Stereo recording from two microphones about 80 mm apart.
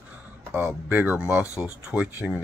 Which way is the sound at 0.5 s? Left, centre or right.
Right.